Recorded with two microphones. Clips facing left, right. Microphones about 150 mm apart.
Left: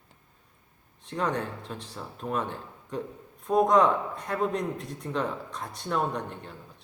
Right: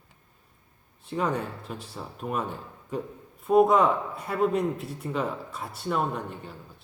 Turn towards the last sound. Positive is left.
turn(degrees=-5)  # may be behind; listen again after turning